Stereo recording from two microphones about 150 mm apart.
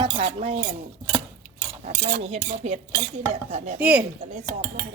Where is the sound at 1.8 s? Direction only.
45° right (ahead or behind).